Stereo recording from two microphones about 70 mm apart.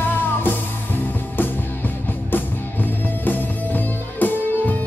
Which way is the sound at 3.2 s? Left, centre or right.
Left.